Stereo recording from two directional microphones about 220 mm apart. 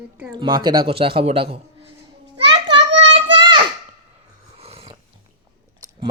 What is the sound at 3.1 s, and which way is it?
Child singing, 25° right (ahead or behind).